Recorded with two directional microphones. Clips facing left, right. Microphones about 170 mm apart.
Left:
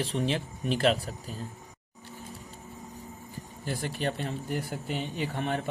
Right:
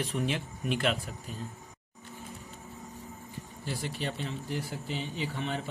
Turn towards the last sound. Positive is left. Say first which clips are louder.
# left 3 dB
turn(degrees=50)  # may be behind; listen again after turning